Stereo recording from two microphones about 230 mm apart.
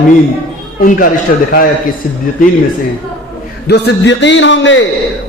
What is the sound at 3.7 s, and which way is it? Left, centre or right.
A man's voice, left.